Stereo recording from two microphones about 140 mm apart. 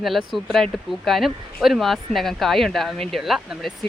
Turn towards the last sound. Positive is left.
turn(degrees=-5)  # may be behind; listen again after turning